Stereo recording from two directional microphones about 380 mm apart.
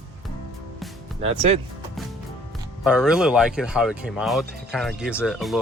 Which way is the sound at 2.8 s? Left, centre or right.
Centre.